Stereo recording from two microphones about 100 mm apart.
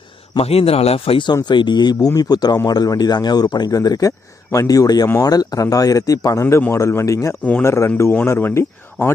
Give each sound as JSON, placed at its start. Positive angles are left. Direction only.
{"t": 0.3, "sound": "speech", "side_deg": 85}
{"t": 1.5, "sound": "speech", "side_deg": 50}